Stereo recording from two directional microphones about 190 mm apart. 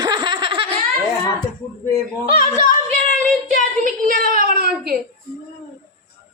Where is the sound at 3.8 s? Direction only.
45° right (ahead or behind).